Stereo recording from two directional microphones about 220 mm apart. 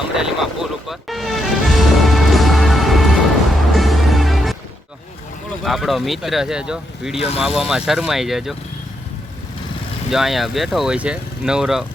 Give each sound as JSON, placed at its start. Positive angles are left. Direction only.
{"t": 0.2, "sound": "music", "side_deg": 0}
{"t": 5.6, "sound": "speech", "side_deg": 0}
{"t": 7.2, "sound": "speech", "side_deg": 25}
{"t": 7.4, "sound": "speech", "side_deg": 0}
{"t": 10.1, "sound": "speech", "side_deg": 0}